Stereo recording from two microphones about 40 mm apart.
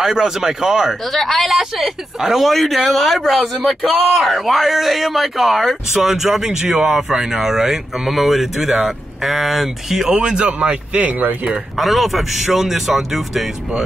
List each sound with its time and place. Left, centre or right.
0.0 s speech: centre
1.1 s a man's voice: centre
1.5 s a man's voice: centre
5.9 s speech: centre
10.1 s speech: right
11.7 s a man's voice: centre